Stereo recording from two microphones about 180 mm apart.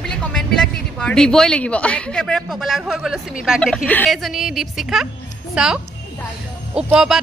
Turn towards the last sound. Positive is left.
turn(degrees=-5)  # may be behind; listen again after turning